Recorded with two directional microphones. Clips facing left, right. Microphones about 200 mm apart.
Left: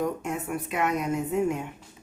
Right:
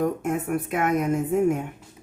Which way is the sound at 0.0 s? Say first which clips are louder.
Right 4 dB; 50° right (ahead or behind).